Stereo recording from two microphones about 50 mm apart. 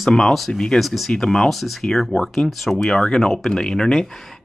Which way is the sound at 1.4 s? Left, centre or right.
Centre.